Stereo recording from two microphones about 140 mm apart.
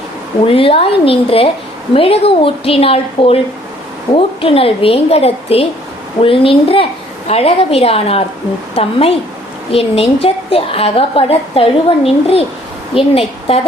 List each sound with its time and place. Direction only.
0.4 s a woman's voice: 40° left (ahead or behind)